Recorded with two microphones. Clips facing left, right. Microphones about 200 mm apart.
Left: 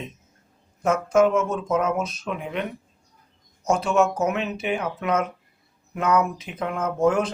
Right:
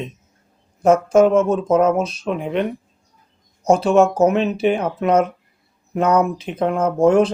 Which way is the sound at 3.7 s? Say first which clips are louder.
Right 7 dB; 30° right (ahead or behind).